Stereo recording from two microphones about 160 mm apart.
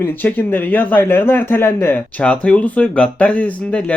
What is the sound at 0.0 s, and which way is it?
Speech, 10° left (ahead or behind).